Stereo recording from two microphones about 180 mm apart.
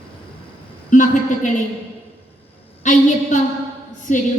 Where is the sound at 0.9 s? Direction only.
45° left (ahead or behind).